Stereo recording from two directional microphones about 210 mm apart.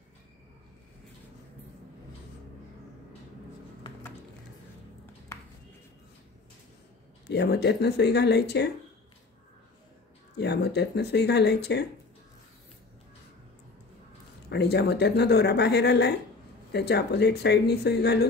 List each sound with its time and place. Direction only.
7.2 s speech: 55° left (ahead or behind)
10.3 s speech: 50° left (ahead or behind)
14.5 s speech: 55° left (ahead or behind)